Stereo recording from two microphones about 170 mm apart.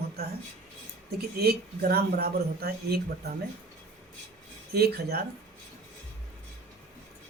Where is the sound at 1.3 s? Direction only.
65° right (ahead or behind).